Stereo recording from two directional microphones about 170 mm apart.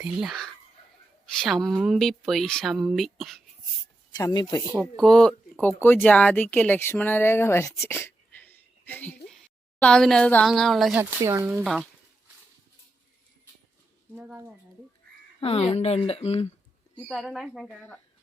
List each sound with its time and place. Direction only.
0.0 s speech: centre (ahead or behind)
4.2 s speech: 25° left (ahead or behind)
4.9 s speech: 5° left (ahead or behind)
11.2 s speech: 15° right (ahead or behind)
11.6 s speech: 5° right (ahead or behind)
14.2 s speech: 10° right (ahead or behind)
15.4 s speech: 35° left (ahead or behind)
17.1 s speech: centre (ahead or behind)